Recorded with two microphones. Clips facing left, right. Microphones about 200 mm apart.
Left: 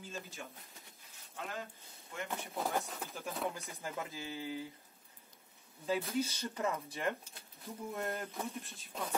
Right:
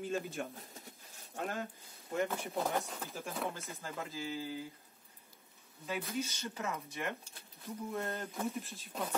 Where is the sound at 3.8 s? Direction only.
15° left (ahead or behind).